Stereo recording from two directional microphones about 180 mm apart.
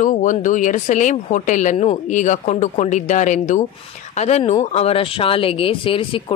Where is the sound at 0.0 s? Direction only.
45° left (ahead or behind).